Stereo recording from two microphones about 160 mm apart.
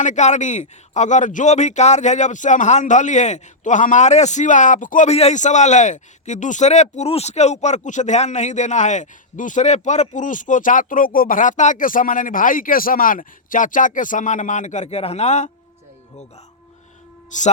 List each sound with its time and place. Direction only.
0.0 s a man's voice: 50° left (ahead or behind)
17.3 s a man's voice: 50° left (ahead or behind)